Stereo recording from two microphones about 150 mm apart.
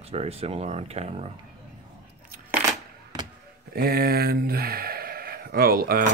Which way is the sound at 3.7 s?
90° right.